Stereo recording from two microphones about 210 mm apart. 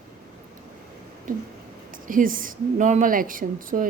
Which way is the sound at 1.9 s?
40° right (ahead or behind).